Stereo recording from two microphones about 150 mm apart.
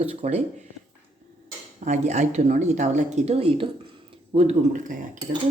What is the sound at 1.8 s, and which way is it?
Speech, 50° right (ahead or behind).